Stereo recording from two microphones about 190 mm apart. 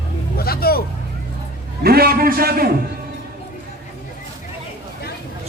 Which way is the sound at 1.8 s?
55° right (ahead or behind).